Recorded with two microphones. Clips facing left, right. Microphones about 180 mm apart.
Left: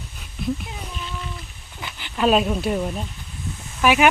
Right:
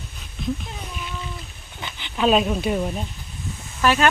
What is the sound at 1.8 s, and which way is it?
Speech, 5° left (ahead or behind).